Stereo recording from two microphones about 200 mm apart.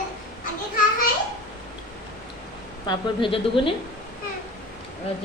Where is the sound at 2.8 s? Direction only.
25° left (ahead or behind).